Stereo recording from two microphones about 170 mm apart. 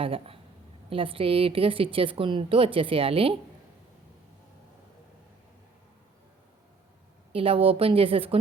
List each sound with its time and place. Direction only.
0.0 s a woman's voice: 35° right (ahead or behind)
7.3 s a woman's voice: 35° right (ahead or behind)